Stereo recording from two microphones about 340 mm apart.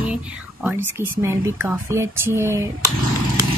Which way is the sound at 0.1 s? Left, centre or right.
Centre.